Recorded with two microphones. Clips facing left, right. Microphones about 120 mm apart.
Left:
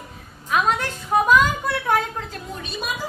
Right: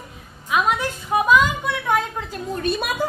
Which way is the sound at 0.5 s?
5° right (ahead or behind).